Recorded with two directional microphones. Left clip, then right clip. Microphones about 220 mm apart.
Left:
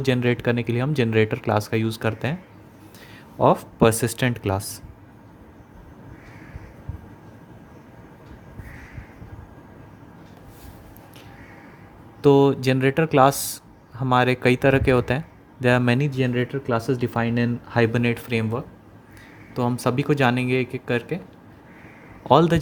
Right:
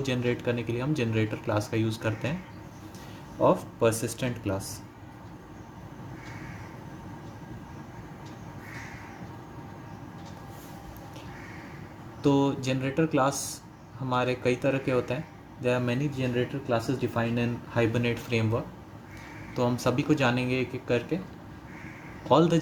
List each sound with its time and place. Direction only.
0.0 s speech: 40° left (ahead or behind)
3.4 s speech: 45° left (ahead or behind)
12.2 s speech: 40° left (ahead or behind)
22.3 s speech: 40° left (ahead or behind)